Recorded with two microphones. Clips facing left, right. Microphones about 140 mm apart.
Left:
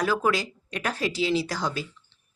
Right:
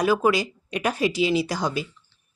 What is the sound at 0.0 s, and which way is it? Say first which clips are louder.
Speech: right 4 dB; 15° right (ahead or behind).